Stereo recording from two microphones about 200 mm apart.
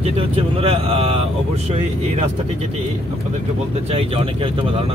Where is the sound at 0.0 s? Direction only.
30° right (ahead or behind).